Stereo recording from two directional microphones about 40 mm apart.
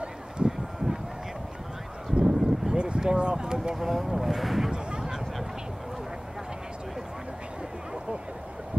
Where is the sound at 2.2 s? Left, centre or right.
Centre.